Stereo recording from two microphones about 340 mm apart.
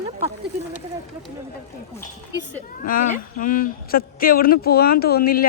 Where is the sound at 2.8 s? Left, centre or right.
Left.